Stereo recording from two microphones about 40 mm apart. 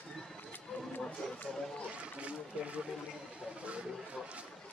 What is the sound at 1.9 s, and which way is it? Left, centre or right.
Speech, right.